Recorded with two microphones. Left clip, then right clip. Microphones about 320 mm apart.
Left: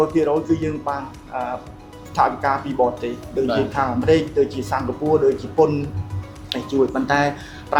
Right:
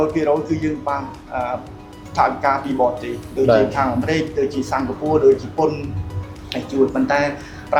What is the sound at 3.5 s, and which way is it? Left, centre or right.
A man's voice, left.